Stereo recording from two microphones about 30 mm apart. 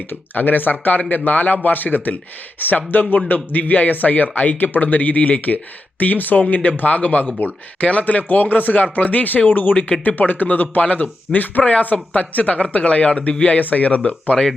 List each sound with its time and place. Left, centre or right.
0.3 s speech: left
1.6 s speech: left
3.2 s speech: left
6.0 s speech: left
6.5 s speech: left
10.8 s speech: left
11.6 s speech: left
12.8 s speech: left
13.6 s speech: left
14.3 s speech: centre